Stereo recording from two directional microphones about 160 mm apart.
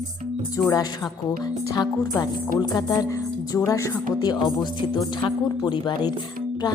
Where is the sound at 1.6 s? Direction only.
20° left (ahead or behind).